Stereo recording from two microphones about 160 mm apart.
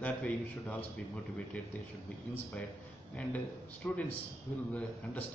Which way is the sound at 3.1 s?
10° left (ahead or behind).